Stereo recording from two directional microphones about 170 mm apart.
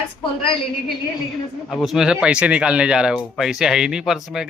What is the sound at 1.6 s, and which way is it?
Speech, centre (ahead or behind).